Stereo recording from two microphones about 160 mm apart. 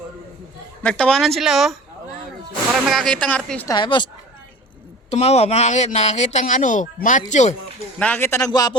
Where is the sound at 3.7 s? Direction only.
30° left (ahead or behind).